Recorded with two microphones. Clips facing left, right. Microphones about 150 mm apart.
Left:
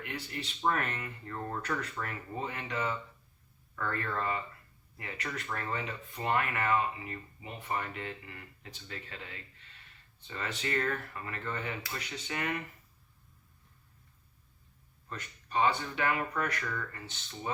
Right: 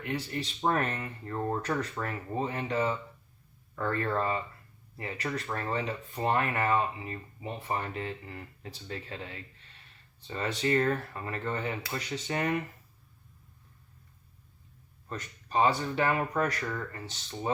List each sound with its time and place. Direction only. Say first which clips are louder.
0.0 s speech: right 6 dB; 35° right (ahead or behind)
15.1 s speech: right 3 dB; 35° right (ahead or behind)